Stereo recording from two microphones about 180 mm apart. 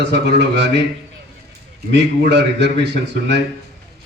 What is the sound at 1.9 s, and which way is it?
A man's voice, 70° right (ahead or behind).